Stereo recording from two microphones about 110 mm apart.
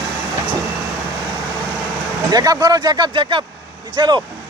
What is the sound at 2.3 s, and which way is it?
Speech, 35° right (ahead or behind).